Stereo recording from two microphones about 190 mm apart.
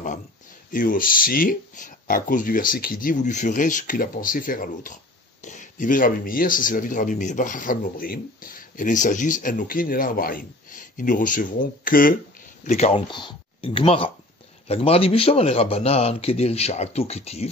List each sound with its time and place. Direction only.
0.7 s speech: 45° left (ahead or behind)
12.6 s a man's voice: 35° left (ahead or behind)